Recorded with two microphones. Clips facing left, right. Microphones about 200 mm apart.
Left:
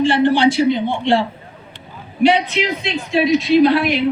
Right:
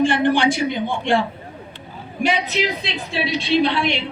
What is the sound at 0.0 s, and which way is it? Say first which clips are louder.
A man's voice: left 3 dB; 50° right (ahead or behind).